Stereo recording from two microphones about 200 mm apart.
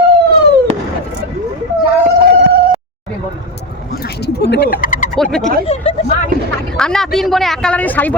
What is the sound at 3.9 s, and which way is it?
Speech, 55° left (ahead or behind).